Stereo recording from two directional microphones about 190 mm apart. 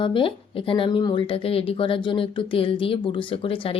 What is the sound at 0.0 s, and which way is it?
Speech, 25° left (ahead or behind).